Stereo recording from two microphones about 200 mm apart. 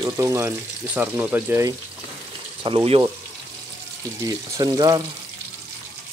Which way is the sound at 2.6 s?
30° right (ahead or behind).